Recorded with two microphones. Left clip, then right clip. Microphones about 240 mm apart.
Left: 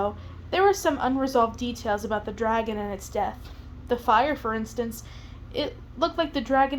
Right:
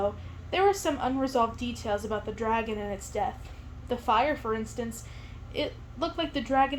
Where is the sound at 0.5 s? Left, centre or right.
Left.